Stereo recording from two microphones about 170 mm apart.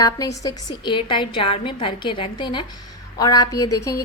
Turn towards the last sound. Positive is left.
turn(degrees=20)  # may be behind; listen again after turning